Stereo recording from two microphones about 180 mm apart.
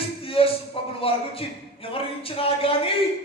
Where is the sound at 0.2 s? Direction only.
30° left (ahead or behind).